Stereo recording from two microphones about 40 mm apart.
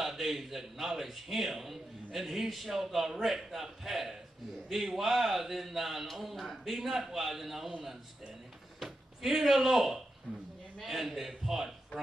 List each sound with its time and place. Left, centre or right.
0.0 s a man's voice: centre
8.7 s speech: centre
10.3 s a woman's voice: right
10.9 s a man's voice: centre